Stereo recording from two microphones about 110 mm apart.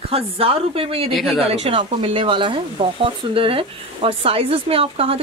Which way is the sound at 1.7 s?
50° right (ahead or behind).